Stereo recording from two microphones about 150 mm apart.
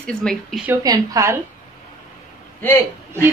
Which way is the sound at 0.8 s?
25° right (ahead or behind).